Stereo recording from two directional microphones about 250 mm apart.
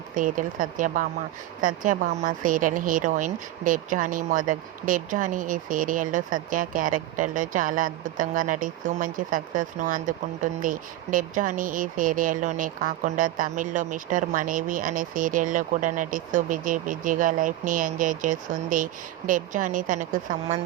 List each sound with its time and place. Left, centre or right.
0.1 s speech: right